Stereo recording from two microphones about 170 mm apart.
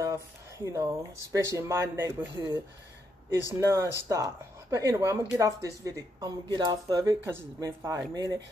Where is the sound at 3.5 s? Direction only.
15° right (ahead or behind).